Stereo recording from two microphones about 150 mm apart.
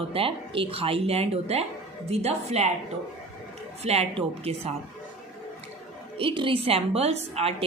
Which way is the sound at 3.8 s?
45° right (ahead or behind).